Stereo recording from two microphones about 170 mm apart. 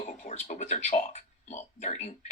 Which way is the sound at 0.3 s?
40° left (ahead or behind).